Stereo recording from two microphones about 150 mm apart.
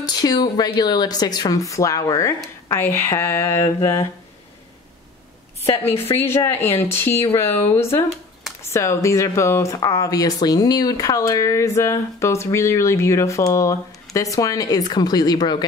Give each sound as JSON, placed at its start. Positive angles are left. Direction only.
{"t": 0.0, "sound": "speech", "side_deg": 25}
{"t": 6.1, "sound": "speech", "side_deg": 15}